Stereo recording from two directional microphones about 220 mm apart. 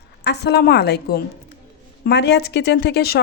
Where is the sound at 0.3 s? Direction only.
50° left (ahead or behind).